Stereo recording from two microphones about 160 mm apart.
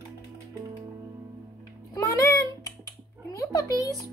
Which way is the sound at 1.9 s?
20° left (ahead or behind).